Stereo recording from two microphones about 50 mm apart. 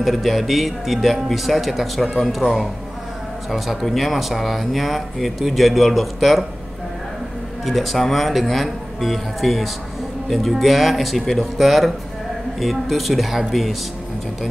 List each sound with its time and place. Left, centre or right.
0.0 s speech: centre
7.6 s speech: centre